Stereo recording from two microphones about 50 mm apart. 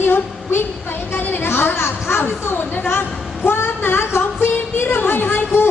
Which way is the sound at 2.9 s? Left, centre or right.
Left.